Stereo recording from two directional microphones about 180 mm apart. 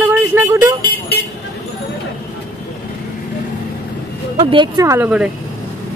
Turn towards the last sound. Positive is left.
turn(degrees=-10)  # may be behind; listen again after turning